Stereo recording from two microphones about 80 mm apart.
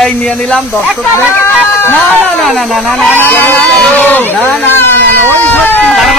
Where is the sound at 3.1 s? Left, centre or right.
Left.